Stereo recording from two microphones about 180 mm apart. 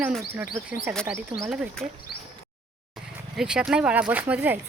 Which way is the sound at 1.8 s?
40° right (ahead or behind).